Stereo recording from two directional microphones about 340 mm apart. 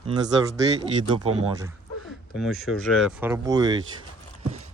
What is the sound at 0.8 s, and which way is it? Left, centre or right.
Speech, centre.